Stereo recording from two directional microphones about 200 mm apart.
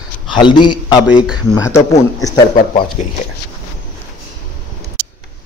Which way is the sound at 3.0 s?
35° left (ahead or behind).